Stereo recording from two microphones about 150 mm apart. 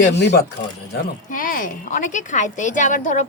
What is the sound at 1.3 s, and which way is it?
A woman's voice, 65° left (ahead or behind).